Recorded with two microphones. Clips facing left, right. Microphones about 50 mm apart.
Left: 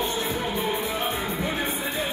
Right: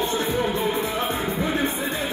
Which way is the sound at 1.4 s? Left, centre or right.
Right.